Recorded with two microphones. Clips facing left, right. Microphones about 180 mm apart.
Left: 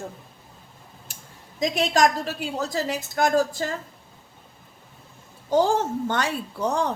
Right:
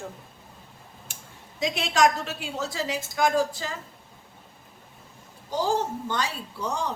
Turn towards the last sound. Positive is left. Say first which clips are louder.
# left 5 dB
turn(degrees=55)  # may be behind; listen again after turning